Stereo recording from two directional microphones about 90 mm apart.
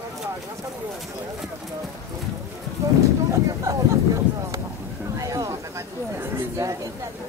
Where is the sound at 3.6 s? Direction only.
40° right (ahead or behind).